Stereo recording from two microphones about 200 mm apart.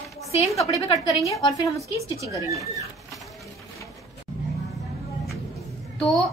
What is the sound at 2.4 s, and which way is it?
Speech, 15° right (ahead or behind).